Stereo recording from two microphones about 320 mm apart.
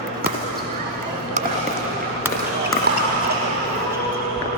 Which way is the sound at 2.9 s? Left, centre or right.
Right.